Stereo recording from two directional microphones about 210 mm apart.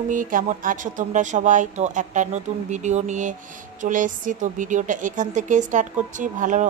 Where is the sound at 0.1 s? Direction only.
40° right (ahead or behind).